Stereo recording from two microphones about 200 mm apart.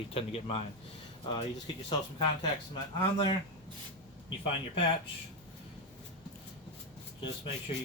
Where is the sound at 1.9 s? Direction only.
20° left (ahead or behind).